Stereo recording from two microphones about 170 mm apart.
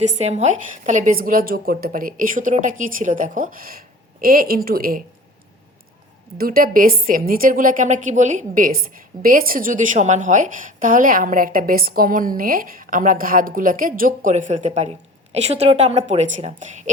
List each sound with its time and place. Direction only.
0.0 s a woman's voice: 40° right (ahead or behind); by 5.0 s 55° right (ahead or behind)
6.3 s a woman's voice: 60° right (ahead or behind); by 16.9 s 45° right (ahead or behind)